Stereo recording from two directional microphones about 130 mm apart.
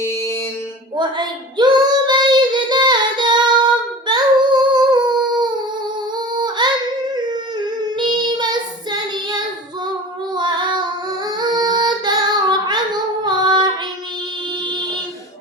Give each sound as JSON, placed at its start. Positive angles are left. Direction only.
{"t": 0.0, "sound": "mantra", "side_deg": 20}
{"t": 0.9, "sound": "child singing", "side_deg": -35}
{"t": 6.1, "sound": "female singing", "side_deg": -35}
{"t": 7.1, "sound": "child singing", "side_deg": -35}
{"t": 13.2, "sound": "female singing", "side_deg": -35}